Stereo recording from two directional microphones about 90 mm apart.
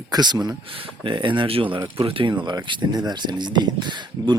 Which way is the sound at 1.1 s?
65° right (ahead or behind).